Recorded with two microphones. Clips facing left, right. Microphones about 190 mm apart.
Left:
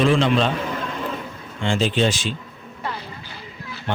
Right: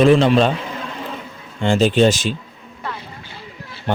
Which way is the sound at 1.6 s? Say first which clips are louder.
Right 6 dB; 45° right (ahead or behind).